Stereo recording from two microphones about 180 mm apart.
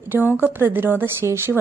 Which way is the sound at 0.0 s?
10° right (ahead or behind).